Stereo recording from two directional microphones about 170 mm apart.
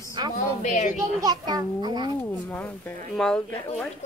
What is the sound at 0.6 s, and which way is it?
Speech, 45° left (ahead or behind).